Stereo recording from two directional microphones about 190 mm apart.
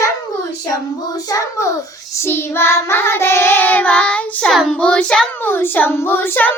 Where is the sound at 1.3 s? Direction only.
15° left (ahead or behind).